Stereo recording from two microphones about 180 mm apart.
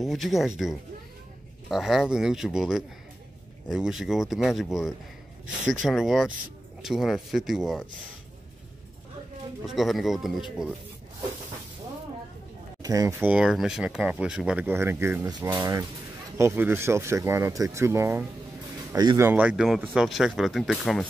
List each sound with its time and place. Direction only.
0.0 s speech: centre (ahead or behind)
9.7 s speech: centre (ahead or behind)
12.8 s speech: 20° right (ahead or behind)
13.3 s speech: 5° right (ahead or behind)